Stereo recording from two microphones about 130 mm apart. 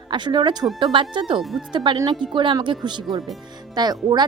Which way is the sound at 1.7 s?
35° right (ahead or behind).